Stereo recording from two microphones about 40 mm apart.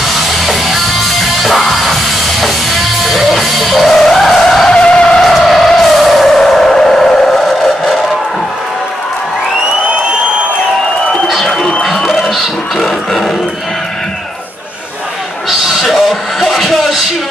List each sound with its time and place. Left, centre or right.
0.1 s music: centre
4.0 s skidding: centre
4.4 s vehicle: centre
4.7 s skidding: left
5.2 s music: centre
7.2 s vehicle: centre
11.2 s a sound: centre
11.8 s music: centre
15.9 s music: centre